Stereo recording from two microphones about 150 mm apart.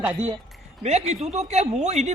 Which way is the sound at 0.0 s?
10° right (ahead or behind).